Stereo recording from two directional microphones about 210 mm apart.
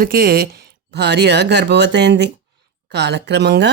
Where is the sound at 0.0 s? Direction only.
45° right (ahead or behind).